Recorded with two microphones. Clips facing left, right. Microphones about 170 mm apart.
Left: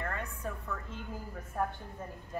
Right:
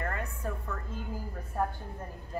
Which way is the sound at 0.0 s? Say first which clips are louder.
Right 2 dB; centre (ahead or behind).